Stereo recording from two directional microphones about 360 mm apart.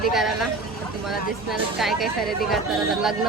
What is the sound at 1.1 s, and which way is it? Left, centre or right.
Speech, centre.